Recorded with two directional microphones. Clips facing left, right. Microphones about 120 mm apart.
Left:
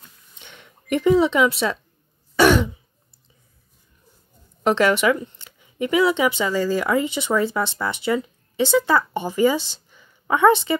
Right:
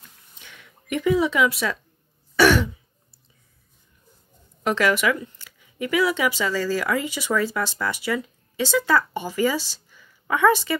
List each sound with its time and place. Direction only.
0.4 s speech: 30° left (ahead or behind)
2.3 s throat clearing: 20° left (ahead or behind)
4.6 s speech: 25° left (ahead or behind)